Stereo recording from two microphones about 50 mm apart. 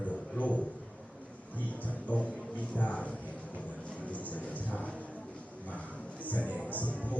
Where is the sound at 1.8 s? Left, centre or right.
Left.